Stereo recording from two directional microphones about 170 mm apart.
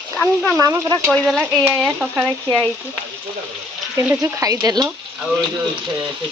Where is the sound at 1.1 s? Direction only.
Centre (ahead or behind).